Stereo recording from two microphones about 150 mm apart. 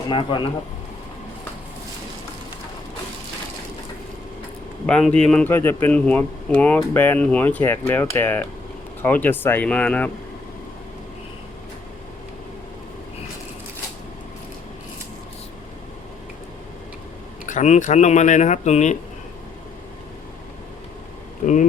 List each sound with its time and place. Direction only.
0.1 s speech: 35° left (ahead or behind)
4.9 s speech: 5° left (ahead or behind)
17.5 s speech: 55° left (ahead or behind)
21.4 s speech: 55° left (ahead or behind)